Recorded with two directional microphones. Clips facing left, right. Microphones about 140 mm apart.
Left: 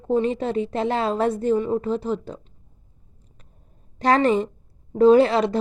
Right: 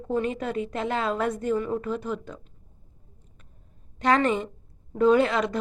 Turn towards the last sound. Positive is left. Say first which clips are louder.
# left 5 dB
turn(degrees=30)  # may be behind; listen again after turning